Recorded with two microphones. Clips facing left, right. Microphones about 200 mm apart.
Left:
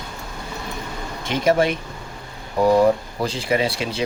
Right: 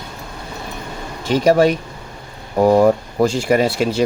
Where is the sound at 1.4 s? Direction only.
40° right (ahead or behind).